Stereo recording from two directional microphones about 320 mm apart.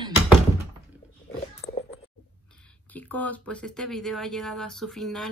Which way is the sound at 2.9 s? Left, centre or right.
Centre.